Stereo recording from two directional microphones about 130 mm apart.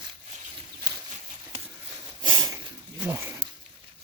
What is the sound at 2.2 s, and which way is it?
Sniff, 35° right (ahead or behind).